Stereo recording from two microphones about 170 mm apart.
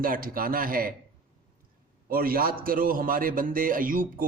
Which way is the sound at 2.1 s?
55° right (ahead or behind).